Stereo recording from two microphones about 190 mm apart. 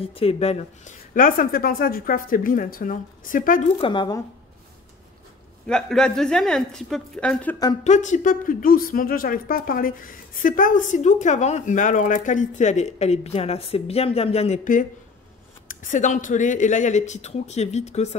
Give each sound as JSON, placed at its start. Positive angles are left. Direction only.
{"t": 0.0, "sound": "speech", "side_deg": 30}
{"t": 3.8, "sound": "speech", "side_deg": 25}
{"t": 5.7, "sound": "a woman's voice", "side_deg": 5}
{"t": 7.8, "sound": "speech", "side_deg": 40}